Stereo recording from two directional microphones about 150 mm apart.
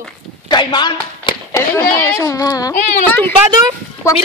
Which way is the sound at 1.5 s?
20° left (ahead or behind).